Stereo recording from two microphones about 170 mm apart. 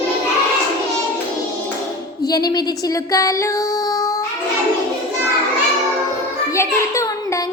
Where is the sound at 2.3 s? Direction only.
20° left (ahead or behind).